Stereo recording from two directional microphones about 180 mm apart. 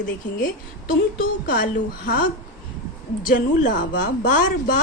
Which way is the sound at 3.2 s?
50° left (ahead or behind).